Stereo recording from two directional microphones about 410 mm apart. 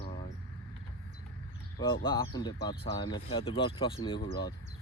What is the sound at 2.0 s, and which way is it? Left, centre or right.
Speech, centre.